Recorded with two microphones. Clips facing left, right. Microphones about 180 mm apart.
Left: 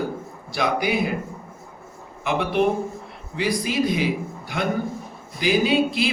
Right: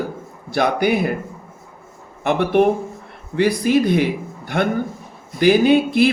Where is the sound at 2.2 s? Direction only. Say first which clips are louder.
Right 5 dB; 55° right (ahead or behind).